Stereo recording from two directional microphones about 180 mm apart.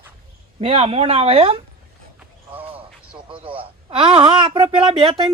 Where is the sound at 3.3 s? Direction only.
30° right (ahead or behind).